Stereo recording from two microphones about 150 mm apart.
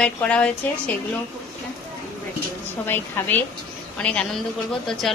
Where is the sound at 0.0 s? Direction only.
5° left (ahead or behind).